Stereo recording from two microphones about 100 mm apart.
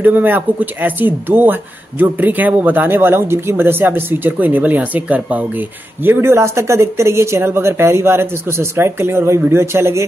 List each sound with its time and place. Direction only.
0.0 s speech: 20° right (ahead or behind)